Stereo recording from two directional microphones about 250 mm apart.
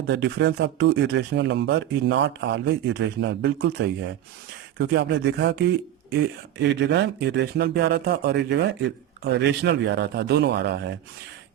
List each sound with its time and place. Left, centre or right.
0.1 s speech: right